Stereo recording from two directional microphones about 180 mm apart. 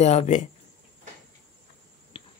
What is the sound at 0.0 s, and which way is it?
Speech, 40° left (ahead or behind).